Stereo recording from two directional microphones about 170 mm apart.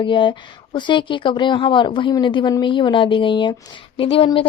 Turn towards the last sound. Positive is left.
turn(degrees=30)  # may be behind; listen again after turning